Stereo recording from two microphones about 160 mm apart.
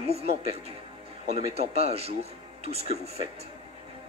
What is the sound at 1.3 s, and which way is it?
Speech, 40° right (ahead or behind).